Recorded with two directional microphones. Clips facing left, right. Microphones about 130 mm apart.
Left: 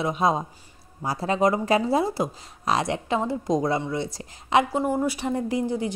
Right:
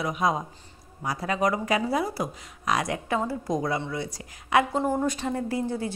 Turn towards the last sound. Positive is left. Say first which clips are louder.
# left 3 dB
turn(degrees=15)  # may be behind; listen again after turning